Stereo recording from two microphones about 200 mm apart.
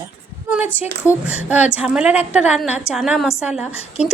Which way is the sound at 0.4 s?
5° right (ahead or behind).